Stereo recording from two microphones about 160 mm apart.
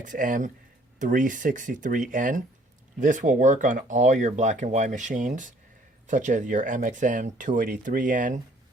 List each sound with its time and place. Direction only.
0.0 s speech: 55° right (ahead or behind)